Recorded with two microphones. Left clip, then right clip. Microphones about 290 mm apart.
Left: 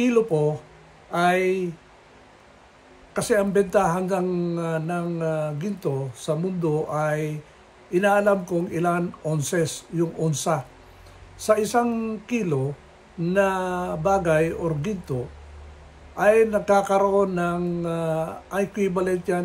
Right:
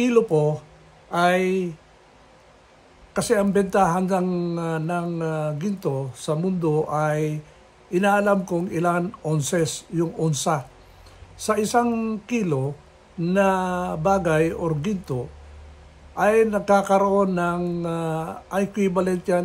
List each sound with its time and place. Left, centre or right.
0.0 s speech: centre
3.1 s speech: centre
16.2 s speech: centre